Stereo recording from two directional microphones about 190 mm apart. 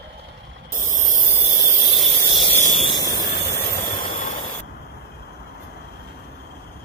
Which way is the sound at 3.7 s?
50° left (ahead or behind).